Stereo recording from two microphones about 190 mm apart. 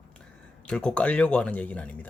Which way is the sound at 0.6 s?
5° left (ahead or behind).